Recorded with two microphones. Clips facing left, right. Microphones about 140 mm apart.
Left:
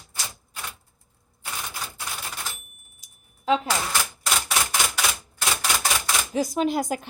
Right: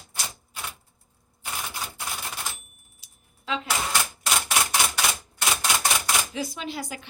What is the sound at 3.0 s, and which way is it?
Typing, 40° left (ahead or behind).